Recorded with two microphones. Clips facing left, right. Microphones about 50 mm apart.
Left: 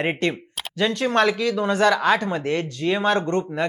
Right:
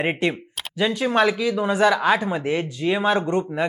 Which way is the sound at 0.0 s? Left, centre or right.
Centre.